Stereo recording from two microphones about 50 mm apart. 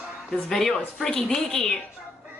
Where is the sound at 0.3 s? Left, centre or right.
Centre.